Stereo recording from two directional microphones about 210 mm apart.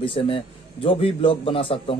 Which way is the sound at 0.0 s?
25° left (ahead or behind).